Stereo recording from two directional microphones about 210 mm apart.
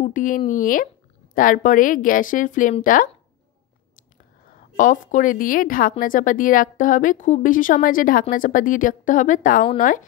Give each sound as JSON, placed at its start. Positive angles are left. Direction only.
{"t": 0.0, "sound": "a woman's voice", "side_deg": 40}
{"t": 4.7, "sound": "a woman's voice", "side_deg": 40}